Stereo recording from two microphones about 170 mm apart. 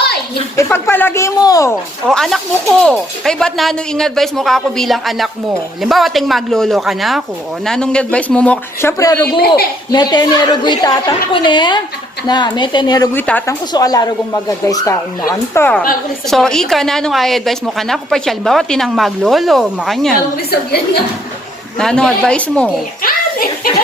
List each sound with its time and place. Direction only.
0.5 s speech: 15° left (ahead or behind)
2.0 s a woman's voice: centre (ahead or behind); by 13.1 s 25° left (ahead or behind)
13.1 s a woman's voice: 10° left (ahead or behind)
20.3 s a woman's voice: 65° left (ahead or behind)
21.8 s a woman's voice: 5° left (ahead or behind)
23.0 s a child's voice: 60° left (ahead or behind)